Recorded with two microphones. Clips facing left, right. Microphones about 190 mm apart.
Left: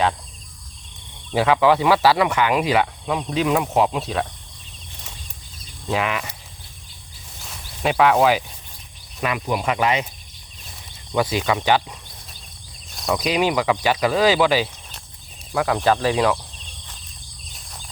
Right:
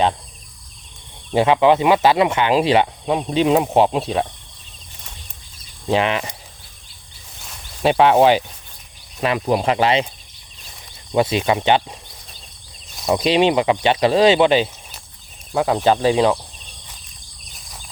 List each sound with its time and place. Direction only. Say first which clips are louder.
1.3 s speech: right 3 dB; 25° right (ahead or behind)
5.9 s speech: right 5 dB; 30° right (ahead or behind)
7.3 s a sound: left 1 dB; centre (ahead or behind)
7.8 s speech: right 3 dB; 30° right (ahead or behind)
11.1 s speech: right 3 dB; 25° right (ahead or behind)
13.1 s speech: right 5 dB; 30° right (ahead or behind)